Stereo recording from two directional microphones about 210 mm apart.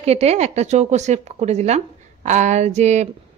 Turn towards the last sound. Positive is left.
turn(degrees=-30)  # may be behind; listen again after turning